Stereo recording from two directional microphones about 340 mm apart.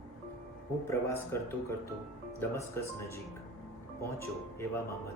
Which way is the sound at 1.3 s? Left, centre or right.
Centre.